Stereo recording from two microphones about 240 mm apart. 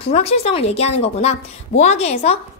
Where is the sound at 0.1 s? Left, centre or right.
Left.